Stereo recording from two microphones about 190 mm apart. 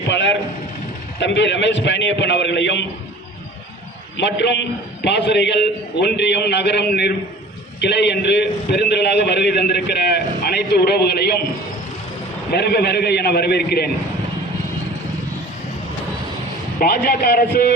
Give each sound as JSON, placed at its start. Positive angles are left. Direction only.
{"t": 0.1, "sound": "a man's voice", "side_deg": 70}
{"t": 4.2, "sound": "a man's voice", "side_deg": 65}
{"t": 12.5, "sound": "a man's voice", "side_deg": 55}
{"t": 16.8, "sound": "speech", "side_deg": 50}